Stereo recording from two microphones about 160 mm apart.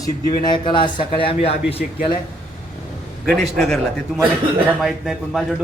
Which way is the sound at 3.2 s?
Centre (ahead or behind).